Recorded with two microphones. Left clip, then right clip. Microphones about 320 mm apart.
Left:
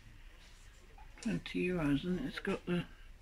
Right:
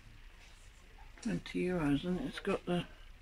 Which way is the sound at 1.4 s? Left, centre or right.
Centre.